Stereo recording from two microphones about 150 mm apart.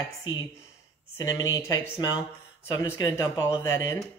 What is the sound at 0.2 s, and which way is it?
A man's voice, 25° left (ahead or behind).